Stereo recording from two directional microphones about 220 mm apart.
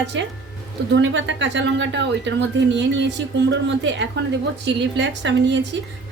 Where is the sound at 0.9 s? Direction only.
55° right (ahead or behind).